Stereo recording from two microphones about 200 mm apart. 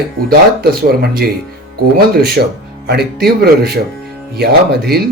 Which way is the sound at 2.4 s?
50° right (ahead or behind).